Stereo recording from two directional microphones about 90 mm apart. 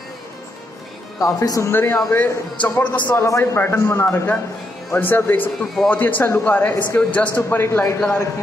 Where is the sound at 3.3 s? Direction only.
35° left (ahead or behind).